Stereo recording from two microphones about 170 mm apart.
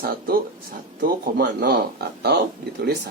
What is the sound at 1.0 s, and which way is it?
Speech, 60° right (ahead or behind).